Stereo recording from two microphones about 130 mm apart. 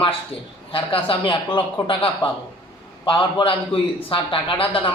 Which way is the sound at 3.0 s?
40° left (ahead or behind).